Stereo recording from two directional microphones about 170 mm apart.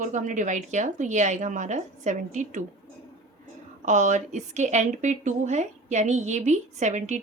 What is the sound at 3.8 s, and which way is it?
Speech, 45° right (ahead or behind).